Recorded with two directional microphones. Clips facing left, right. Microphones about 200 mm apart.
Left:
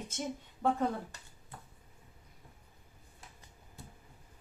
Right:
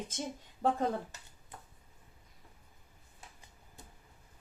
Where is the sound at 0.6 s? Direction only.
35° right (ahead or behind).